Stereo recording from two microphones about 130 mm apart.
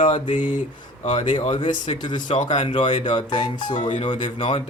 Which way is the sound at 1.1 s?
40° left (ahead or behind).